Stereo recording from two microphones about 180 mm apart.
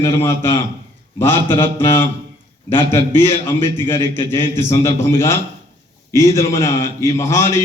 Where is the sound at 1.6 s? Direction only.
15° left (ahead or behind).